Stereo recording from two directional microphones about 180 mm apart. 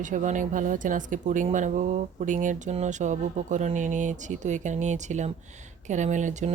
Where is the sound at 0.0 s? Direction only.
45° right (ahead or behind).